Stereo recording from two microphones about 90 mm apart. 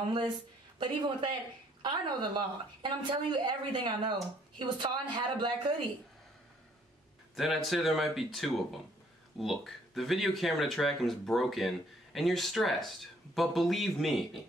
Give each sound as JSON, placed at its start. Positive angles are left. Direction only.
{"t": 0.7, "sound": "a woman's voice", "side_deg": -60}
{"t": 7.3, "sound": "speech", "side_deg": 0}